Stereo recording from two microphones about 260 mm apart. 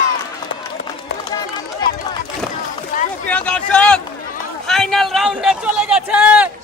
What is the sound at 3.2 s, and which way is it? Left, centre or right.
A man's voice, centre.